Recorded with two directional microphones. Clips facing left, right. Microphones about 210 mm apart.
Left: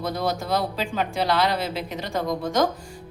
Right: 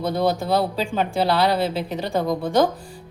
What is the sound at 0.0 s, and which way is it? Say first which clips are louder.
A woman's voice: right 5 dB; 25° right (ahead or behind).